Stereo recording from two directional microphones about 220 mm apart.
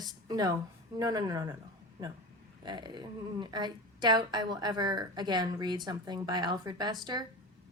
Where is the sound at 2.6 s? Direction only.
20° right (ahead or behind).